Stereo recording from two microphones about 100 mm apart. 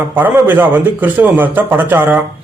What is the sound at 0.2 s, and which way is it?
A man's voice, 20° right (ahead or behind).